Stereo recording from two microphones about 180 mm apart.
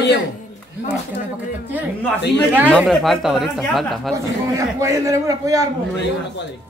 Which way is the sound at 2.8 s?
Centre (ahead or behind).